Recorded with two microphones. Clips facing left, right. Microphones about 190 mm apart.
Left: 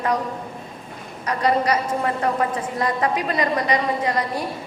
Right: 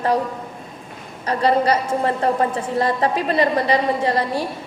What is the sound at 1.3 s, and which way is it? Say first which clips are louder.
A woman's voice: right 3 dB; 30° right (ahead or behind).